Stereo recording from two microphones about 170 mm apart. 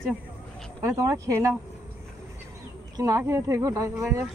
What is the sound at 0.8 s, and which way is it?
Speech, 20° right (ahead or behind).